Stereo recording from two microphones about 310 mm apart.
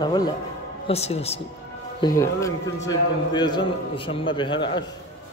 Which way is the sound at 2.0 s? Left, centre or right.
Centre.